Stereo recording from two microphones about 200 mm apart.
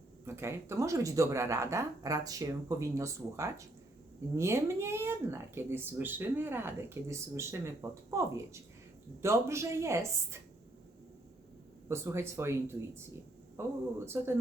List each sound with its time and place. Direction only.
0.3 s speech: 15° right (ahead or behind)
11.9 s speech: 15° right (ahead or behind)